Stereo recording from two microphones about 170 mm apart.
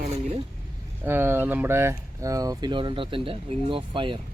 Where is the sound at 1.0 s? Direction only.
15° right (ahead or behind); by 4.2 s 30° right (ahead or behind).